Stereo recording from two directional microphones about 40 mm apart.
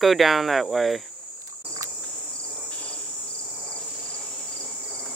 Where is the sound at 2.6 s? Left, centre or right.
Left.